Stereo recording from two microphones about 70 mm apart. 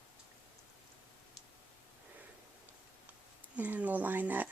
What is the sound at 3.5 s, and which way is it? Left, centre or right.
Speech, right.